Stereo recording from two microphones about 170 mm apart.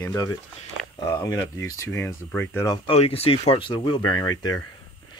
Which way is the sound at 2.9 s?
35° left (ahead or behind).